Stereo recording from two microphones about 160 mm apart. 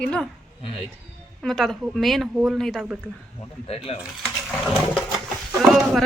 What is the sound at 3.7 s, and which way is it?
Speech, 35° left (ahead or behind).